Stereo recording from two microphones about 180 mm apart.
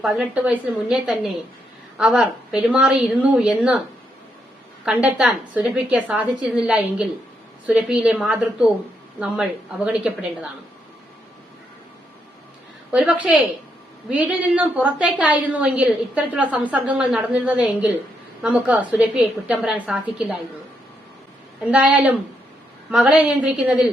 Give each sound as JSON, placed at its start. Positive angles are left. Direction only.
{"t": 0.0, "sound": "a woman's voice", "side_deg": -5}
{"t": 4.9, "sound": "a woman's voice", "side_deg": -5}
{"t": 12.9, "sound": "a woman's voice", "side_deg": -10}
{"t": 21.6, "sound": "a woman's voice", "side_deg": -5}